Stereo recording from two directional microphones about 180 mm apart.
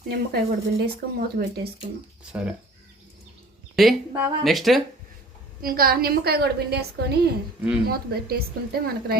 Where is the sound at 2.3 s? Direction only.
10° right (ahead or behind).